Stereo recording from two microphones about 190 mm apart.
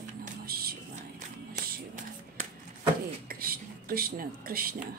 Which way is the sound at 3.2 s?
50° right (ahead or behind).